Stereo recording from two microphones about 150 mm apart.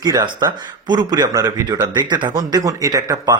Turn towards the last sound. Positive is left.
turn(degrees=-25)  # may be behind; listen again after turning